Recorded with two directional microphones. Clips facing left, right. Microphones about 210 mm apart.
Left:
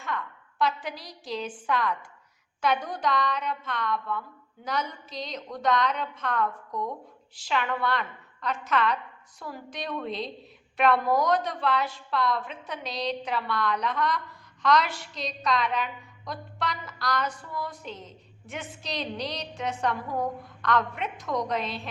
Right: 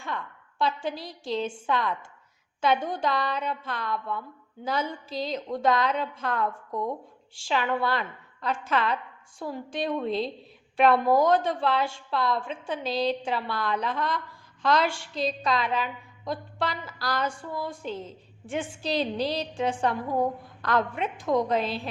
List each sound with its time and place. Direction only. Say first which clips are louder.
0.1 s a sound: left 1 dB; 25° right (ahead or behind)
0.6 s a woman's voice: right 1 dB; 30° right (ahead or behind)
10.1 s a woman's voice: right 5 dB; centre (ahead or behind)
10.8 s a woman's voice: right 3 dB; 30° right (ahead or behind)